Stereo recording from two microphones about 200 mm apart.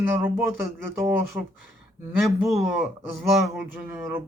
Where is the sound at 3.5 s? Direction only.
10° right (ahead or behind).